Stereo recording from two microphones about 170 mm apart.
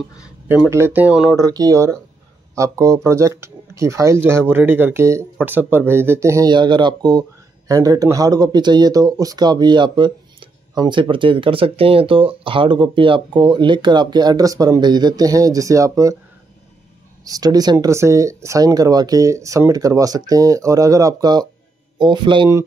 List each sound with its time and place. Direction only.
0.5 s speech: 15° right (ahead or behind)
1.3 s speech: 20° right (ahead or behind)
17.3 s a man's voice: 20° right (ahead or behind)